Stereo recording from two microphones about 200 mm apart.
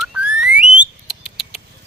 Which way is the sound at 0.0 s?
5° right (ahead or behind).